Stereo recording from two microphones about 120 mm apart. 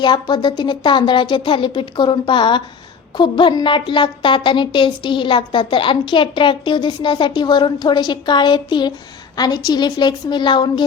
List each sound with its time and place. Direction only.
0.0 s a woman's voice: 35° left (ahead or behind)